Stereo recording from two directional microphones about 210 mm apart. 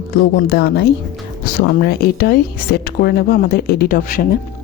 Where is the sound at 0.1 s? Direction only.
50° left (ahead or behind).